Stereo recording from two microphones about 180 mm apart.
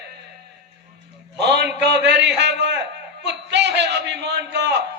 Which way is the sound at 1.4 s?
70° right (ahead or behind).